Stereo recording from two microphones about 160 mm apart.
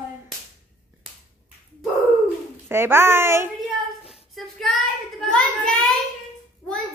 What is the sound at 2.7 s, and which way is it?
Speech, 15° right (ahead or behind).